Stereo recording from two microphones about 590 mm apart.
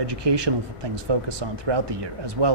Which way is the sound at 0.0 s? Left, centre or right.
Right.